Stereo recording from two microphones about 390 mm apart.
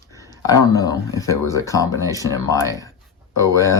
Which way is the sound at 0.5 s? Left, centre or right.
Centre.